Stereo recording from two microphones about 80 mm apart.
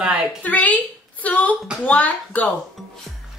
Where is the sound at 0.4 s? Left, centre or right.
Centre.